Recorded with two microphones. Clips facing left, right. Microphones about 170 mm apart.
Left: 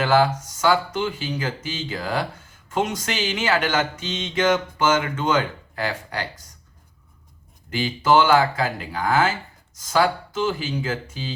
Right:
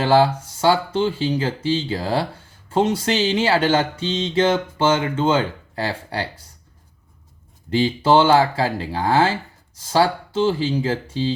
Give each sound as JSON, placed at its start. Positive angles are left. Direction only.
{"t": 0.0, "sound": "speech", "side_deg": -30}
{"t": 7.7, "sound": "speech", "side_deg": -30}